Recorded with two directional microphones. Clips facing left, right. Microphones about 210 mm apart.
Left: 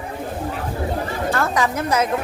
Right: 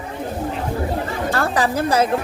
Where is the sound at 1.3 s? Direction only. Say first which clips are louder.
Right 2 dB; 35° right (ahead or behind).